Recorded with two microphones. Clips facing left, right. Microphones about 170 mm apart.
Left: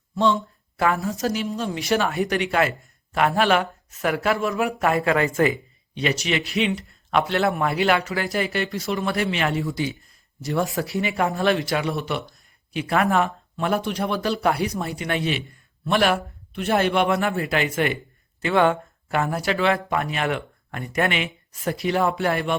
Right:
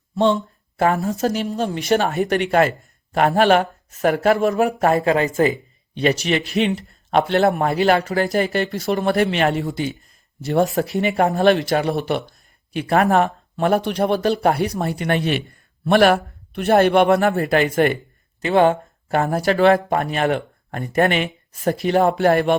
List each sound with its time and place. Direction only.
1.2 s speech: 55° right (ahead or behind)
1.8 s speech: 40° right (ahead or behind)
3.1 s speech: 30° right (ahead or behind)
3.3 s speech: 45° right (ahead or behind); by 5.5 s 25° right (ahead or behind)
6.0 s speech: 45° right (ahead or behind)
8.7 s speech: 55° right (ahead or behind)
11.7 s speech: 45° right (ahead or behind)
18.4 s speech: 35° right (ahead or behind); by 22.5 s 50° right (ahead or behind)